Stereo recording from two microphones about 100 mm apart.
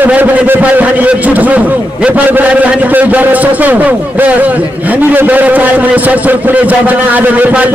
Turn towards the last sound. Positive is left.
turn(degrees=-15)  # may be behind; listen again after turning